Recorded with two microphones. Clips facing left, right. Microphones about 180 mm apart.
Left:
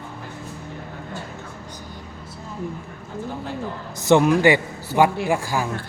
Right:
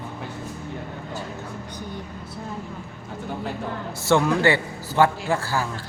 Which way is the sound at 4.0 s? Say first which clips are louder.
Left 4 dB; 20° left (ahead or behind).